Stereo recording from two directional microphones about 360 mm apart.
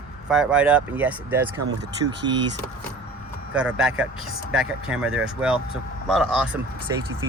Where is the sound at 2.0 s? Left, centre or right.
Right.